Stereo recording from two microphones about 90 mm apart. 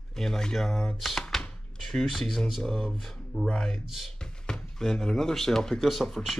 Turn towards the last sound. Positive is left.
turn(degrees=0)  # may be behind; listen again after turning